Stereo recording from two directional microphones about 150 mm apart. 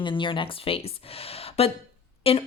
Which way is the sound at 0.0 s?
35° left (ahead or behind).